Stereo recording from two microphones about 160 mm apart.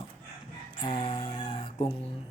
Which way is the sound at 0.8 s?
30° left (ahead or behind).